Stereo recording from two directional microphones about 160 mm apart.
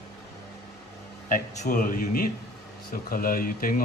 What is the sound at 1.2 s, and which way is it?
Speech, 55° left (ahead or behind).